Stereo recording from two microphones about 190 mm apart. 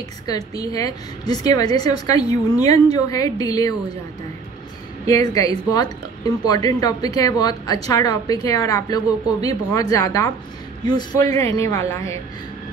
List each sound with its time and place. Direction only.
0.3 s a woman's voice: 20° left (ahead or behind)
5.0 s a woman's voice: 20° left (ahead or behind)